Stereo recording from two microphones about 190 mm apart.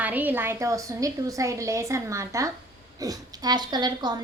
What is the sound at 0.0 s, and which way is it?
A woman's voice, 10° right (ahead or behind).